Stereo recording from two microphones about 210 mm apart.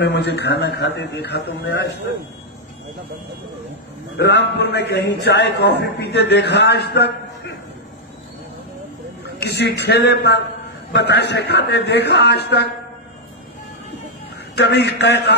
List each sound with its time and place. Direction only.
0.0 s a man's voice: 55° left (ahead or behind)
4.2 s a man's voice: 55° left (ahead or behind)
9.4 s a man's voice: 55° left (ahead or behind)
14.5 s a man's voice: 55° left (ahead or behind)